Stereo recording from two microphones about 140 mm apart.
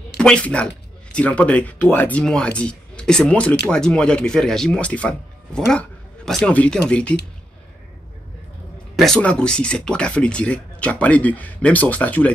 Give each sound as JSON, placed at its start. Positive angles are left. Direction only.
{"t": 0.2, "sound": "speech", "side_deg": 5}
{"t": 8.9, "sound": "speech", "side_deg": 5}